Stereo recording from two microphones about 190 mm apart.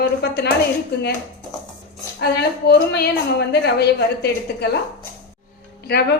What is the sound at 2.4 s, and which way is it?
A woman's voice, 55° left (ahead or behind).